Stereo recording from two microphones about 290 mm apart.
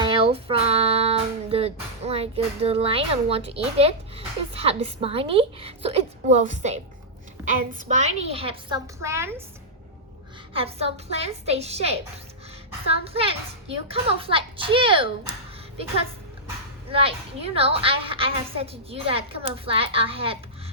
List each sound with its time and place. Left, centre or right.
0.0 s music: centre
7.7 s a woman's voice: right; by 9.3 s centre
10.5 s a woman's voice: centre
13.7 s a woman's voice: centre
16.9 s a woman's voice: centre